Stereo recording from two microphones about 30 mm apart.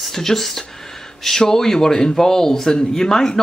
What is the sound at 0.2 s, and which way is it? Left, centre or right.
Speech, centre.